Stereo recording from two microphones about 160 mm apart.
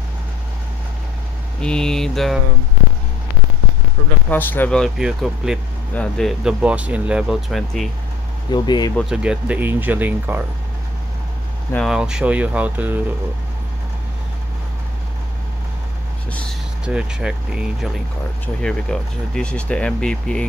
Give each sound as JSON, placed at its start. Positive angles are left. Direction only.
{"t": 1.6, "sound": "speech", "side_deg": 5}
{"t": 4.3, "sound": "speech", "side_deg": 10}
{"t": 8.5, "sound": "speech", "side_deg": 25}
{"t": 9.1, "sound": "speech", "side_deg": -5}
{"t": 11.7, "sound": "speech", "side_deg": 0}
{"t": 16.8, "sound": "speech", "side_deg": -5}
{"t": 18.6, "sound": "speech", "side_deg": 5}